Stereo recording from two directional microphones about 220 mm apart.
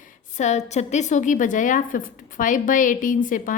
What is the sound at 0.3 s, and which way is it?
A woman's voice, 30° left (ahead or behind).